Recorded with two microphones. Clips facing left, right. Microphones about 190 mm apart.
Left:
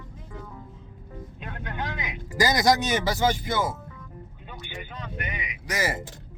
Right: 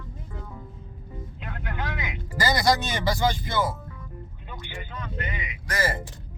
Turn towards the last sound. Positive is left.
turn(degrees=15)  # may be behind; listen again after turning